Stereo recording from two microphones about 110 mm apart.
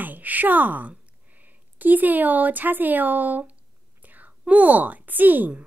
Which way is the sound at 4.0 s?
15° right (ahead or behind).